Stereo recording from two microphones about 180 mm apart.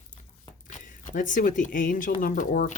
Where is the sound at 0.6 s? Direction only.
45° left (ahead or behind).